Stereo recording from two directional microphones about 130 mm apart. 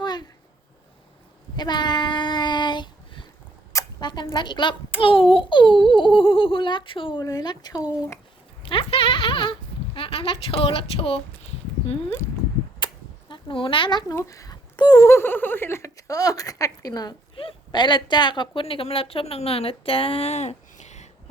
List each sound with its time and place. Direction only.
0.0 s a sound: 35° left (ahead or behind)
1.5 s child singing: 35° left (ahead or behind)
3.7 s a child's voice: 30° left (ahead or behind)
8.6 s speech: 40° left (ahead or behind)
12.8 s cap gun: 40° left (ahead or behind)
14.2 s speech: 25° left (ahead or behind); by 21.1 s 65° left (ahead or behind)